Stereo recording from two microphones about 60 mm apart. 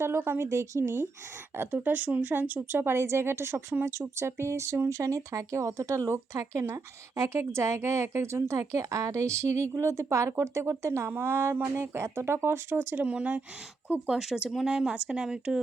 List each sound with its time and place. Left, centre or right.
0.0 s speech: right
0.4 s speech: right
1.5 s speech: right
2.7 s speech: right
13.1 s speech: right
14.1 s speech: centre